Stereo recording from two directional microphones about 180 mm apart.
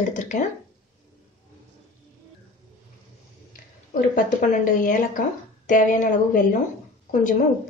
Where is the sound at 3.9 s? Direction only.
50° left (ahead or behind).